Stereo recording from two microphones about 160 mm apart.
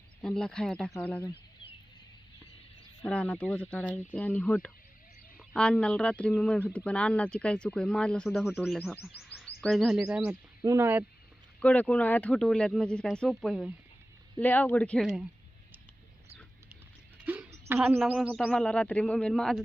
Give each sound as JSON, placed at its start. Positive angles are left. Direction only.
{"t": 0.2, "sound": "speech", "side_deg": 5}
{"t": 3.0, "sound": "speech", "side_deg": 5}
{"t": 10.6, "sound": "speech", "side_deg": -20}
{"t": 11.6, "sound": "speech", "side_deg": 10}
{"t": 17.7, "sound": "speech", "side_deg": -10}
{"t": 18.3, "sound": "speech", "side_deg": 5}